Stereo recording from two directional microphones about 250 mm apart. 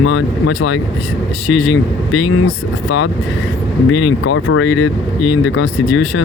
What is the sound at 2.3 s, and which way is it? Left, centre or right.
Speech, left.